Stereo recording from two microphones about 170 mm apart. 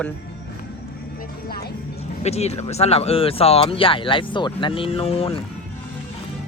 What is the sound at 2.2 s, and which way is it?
Speech, 40° left (ahead or behind).